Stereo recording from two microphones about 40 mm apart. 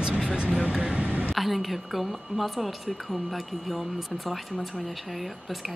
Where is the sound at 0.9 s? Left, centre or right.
Right.